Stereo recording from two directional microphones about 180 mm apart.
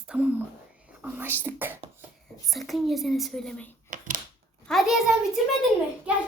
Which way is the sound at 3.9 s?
45° right (ahead or behind).